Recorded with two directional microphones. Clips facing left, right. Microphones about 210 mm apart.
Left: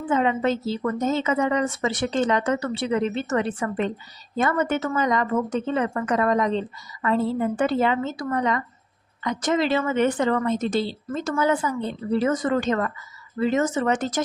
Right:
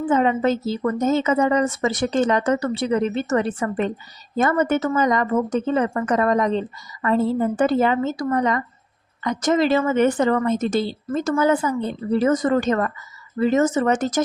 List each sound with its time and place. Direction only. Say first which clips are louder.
0.1 s a woman's voice: right 2 dB; 40° right (ahead or behind)